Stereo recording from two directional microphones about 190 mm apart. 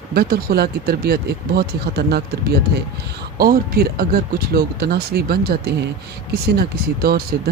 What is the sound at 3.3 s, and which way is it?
Speech, 50° right (ahead or behind).